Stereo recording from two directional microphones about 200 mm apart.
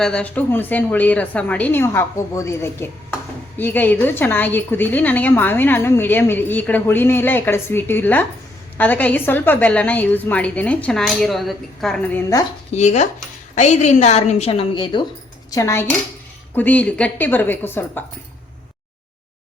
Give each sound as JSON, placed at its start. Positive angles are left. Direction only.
{"t": 0.0, "sound": "a woman's voice", "side_deg": 5}
{"t": 12.7, "sound": "a woman's voice", "side_deg": 35}
{"t": 15.4, "sound": "a woman's voice", "side_deg": 15}